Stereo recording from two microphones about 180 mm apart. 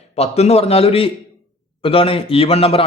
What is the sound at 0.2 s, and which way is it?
A man's voice, 35° left (ahead or behind).